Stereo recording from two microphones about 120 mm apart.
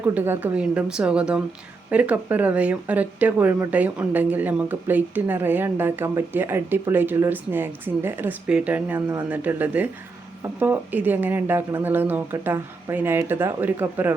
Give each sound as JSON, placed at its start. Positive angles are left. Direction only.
{"t": 0.0, "sound": "speech", "side_deg": -15}